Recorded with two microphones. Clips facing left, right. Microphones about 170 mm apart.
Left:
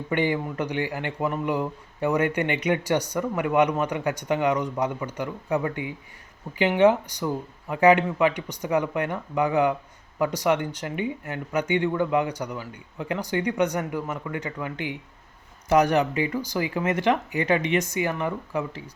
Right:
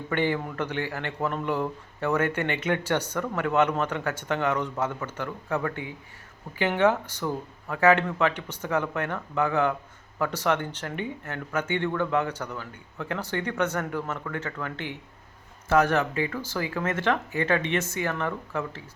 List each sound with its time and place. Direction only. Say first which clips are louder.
0.1 s speech: left 2 dB; 15° left (ahead or behind)